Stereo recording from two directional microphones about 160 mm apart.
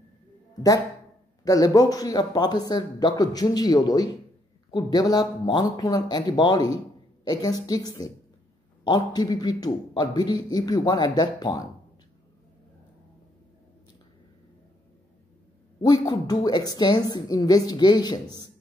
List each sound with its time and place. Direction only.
1.4 s a man's voice: 20° left (ahead or behind)
15.8 s a man's voice: 25° left (ahead or behind)